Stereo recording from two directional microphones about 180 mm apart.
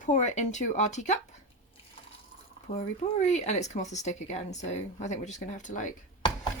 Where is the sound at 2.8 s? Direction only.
40° left (ahead or behind).